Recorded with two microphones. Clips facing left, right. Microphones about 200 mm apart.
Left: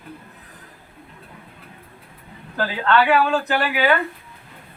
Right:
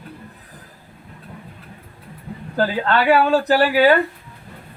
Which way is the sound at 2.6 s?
35° right (ahead or behind).